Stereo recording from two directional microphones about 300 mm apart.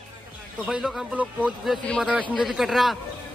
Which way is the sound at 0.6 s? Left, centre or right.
Centre.